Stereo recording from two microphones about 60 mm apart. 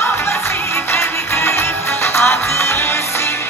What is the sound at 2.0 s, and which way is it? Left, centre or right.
Music, left.